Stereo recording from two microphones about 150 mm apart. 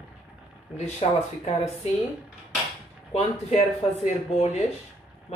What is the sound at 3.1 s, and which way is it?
Speech, 45° left (ahead or behind).